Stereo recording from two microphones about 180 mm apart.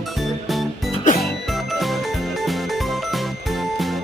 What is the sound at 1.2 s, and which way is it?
Music, centre (ahead or behind).